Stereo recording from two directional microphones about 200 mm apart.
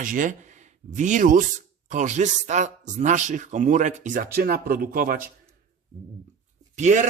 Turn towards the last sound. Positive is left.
turn(degrees=-35)  # may be behind; listen again after turning